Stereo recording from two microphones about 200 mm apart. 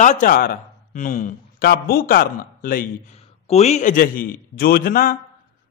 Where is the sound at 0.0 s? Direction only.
40° left (ahead or behind).